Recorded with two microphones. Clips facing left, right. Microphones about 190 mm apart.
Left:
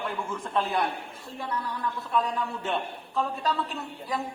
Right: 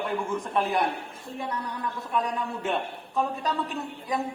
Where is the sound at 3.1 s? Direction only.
15° right (ahead or behind).